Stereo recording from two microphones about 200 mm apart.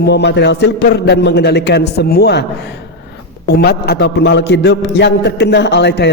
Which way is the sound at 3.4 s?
50° left (ahead or behind).